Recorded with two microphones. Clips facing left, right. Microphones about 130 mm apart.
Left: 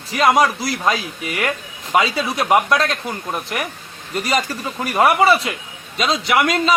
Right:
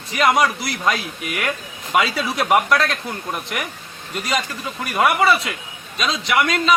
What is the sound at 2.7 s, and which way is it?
Speech, centre (ahead or behind).